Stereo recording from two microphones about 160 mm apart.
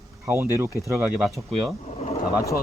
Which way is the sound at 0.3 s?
10° right (ahead or behind).